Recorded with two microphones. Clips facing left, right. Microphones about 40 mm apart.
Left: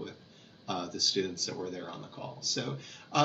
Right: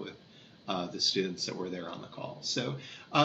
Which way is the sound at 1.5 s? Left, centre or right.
Right.